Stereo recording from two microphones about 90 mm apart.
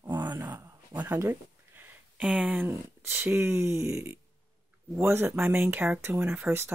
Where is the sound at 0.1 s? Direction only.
55° right (ahead or behind).